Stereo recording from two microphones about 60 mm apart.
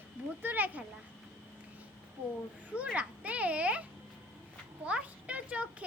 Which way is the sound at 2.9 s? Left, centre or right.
Right.